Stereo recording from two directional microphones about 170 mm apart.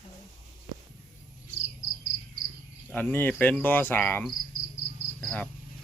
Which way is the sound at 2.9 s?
10° left (ahead or behind).